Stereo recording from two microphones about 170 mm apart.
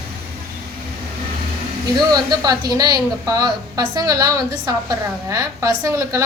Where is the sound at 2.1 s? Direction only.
25° right (ahead or behind).